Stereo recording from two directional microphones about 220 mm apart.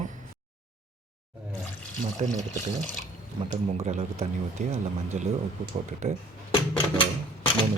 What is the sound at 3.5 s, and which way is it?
Speech, 30° right (ahead or behind).